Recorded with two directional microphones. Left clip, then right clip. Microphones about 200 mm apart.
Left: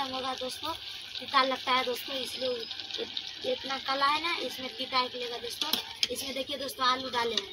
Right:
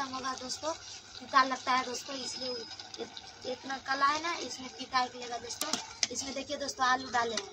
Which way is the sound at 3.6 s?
5° right (ahead or behind).